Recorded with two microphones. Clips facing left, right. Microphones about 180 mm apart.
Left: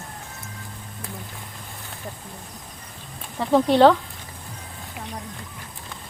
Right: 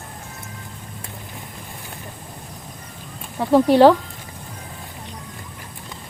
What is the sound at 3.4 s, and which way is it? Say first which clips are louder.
Speech: right 3 dB; 10° right (ahead or behind).